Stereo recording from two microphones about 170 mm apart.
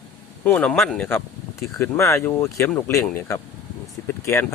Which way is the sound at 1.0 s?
15° left (ahead or behind).